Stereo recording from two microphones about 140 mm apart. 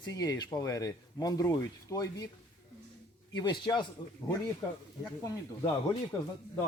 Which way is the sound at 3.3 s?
30° left (ahead or behind).